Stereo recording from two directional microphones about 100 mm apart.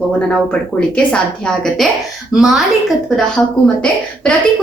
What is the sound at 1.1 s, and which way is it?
Speech, 10° left (ahead or behind).